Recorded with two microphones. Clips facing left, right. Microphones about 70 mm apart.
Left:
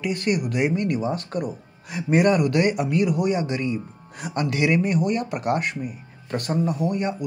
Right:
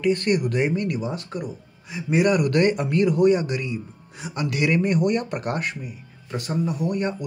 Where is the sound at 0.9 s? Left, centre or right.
Left.